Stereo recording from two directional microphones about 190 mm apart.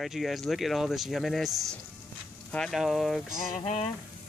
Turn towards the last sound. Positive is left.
turn(degrees=35)  # may be behind; listen again after turning